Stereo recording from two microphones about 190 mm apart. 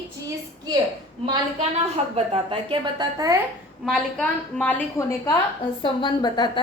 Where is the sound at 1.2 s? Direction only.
30° right (ahead or behind).